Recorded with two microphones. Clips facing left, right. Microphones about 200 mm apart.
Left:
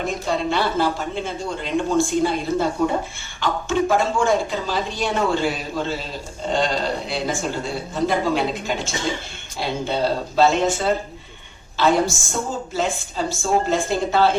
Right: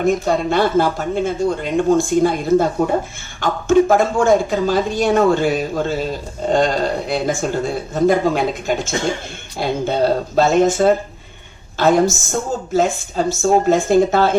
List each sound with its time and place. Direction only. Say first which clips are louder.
0.0 s speech: right 7 dB; 50° right (ahead or behind)